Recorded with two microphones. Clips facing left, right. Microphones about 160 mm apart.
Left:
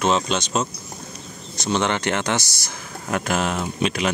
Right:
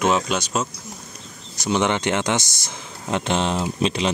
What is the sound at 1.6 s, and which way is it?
Speech, 15° right (ahead or behind).